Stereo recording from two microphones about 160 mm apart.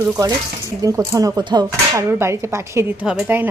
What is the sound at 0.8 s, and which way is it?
A woman's voice, 20° right (ahead or behind).